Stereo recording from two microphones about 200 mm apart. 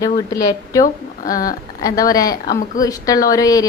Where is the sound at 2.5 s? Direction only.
40° left (ahead or behind).